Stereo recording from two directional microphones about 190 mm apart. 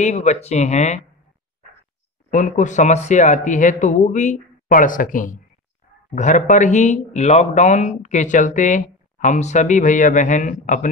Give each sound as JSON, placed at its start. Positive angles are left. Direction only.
{"t": 0.0, "sound": "speech", "side_deg": 35}
{"t": 2.3, "sound": "speech", "side_deg": 40}